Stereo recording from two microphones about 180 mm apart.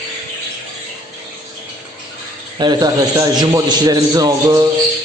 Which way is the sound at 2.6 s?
25° right (ahead or behind).